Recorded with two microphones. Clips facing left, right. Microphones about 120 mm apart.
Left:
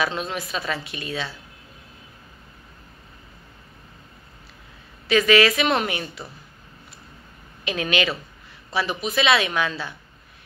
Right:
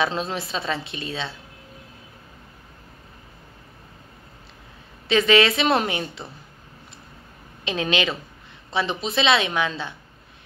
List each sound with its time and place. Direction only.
0.0 s a woman's voice: 30° right (ahead or behind)
5.0 s a woman's voice: 25° right (ahead or behind)
7.6 s a woman's voice: 25° right (ahead or behind)